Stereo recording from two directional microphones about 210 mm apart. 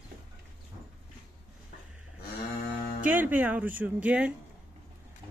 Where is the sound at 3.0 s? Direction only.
10° right (ahead or behind).